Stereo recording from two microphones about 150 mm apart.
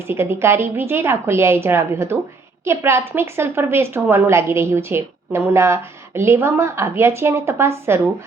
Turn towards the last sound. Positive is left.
turn(degrees=-15)  # may be behind; listen again after turning